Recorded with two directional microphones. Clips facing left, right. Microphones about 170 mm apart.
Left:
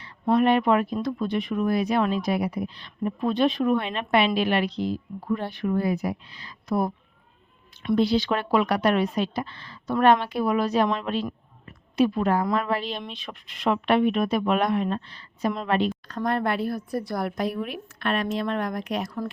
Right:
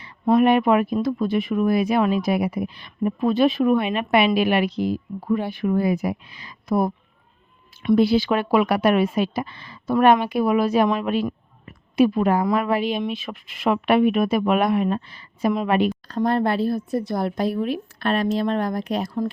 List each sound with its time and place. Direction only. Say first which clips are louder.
0.0 s speech: right 4 dB; 10° right (ahead or behind)
16.0 s a woman's voice: right 5 dB; 30° right (ahead or behind)